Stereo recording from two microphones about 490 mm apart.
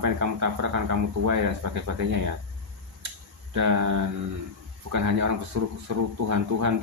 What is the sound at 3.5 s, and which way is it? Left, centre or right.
Speech, right.